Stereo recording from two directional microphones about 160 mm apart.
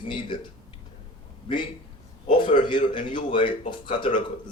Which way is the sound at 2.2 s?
35° left (ahead or behind).